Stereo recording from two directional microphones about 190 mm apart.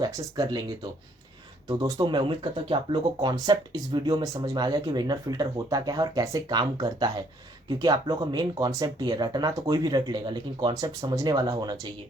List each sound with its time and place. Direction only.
0.0 s speech: 20° right (ahead or behind)
1.6 s speech: 20° right (ahead or behind)